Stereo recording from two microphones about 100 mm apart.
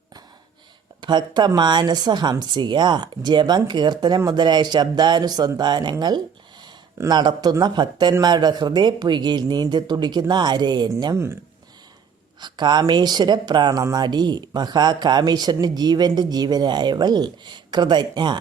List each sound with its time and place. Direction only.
1.0 s speech: 45° right (ahead or behind)
11.1 s speech: 25° right (ahead or behind)
12.4 s speech: 50° right (ahead or behind)